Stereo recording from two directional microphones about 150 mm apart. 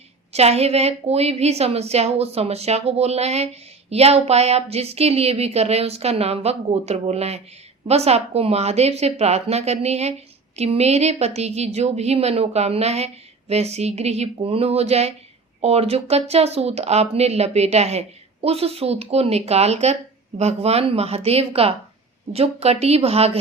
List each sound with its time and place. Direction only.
0.3 s a woman's voice: 45° right (ahead or behind)